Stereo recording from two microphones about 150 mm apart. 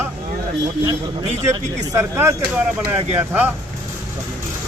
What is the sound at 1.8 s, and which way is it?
A man's voice, 20° right (ahead or behind).